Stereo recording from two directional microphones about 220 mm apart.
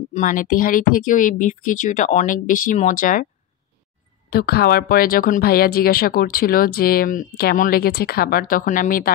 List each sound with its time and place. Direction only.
0.1 s speech: 35° left (ahead or behind)
4.3 s speech: 45° left (ahead or behind)